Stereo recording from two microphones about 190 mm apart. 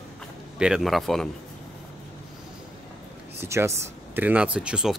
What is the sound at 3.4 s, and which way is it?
Speech, 15° right (ahead or behind).